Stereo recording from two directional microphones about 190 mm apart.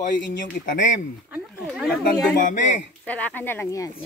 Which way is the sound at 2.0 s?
45° left (ahead or behind).